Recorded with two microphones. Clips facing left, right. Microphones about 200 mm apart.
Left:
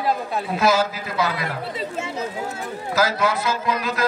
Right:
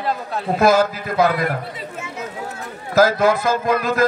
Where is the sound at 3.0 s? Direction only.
50° right (ahead or behind).